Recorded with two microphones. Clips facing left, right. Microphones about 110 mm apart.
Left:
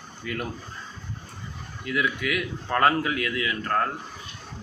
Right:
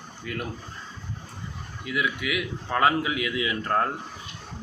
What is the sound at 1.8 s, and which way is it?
A man's voice, 5° right (ahead or behind).